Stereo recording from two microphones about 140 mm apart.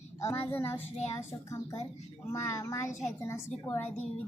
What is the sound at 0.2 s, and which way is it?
Speech, 15° left (ahead or behind).